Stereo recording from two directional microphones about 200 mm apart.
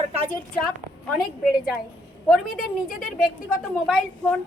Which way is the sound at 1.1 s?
Centre (ahead or behind).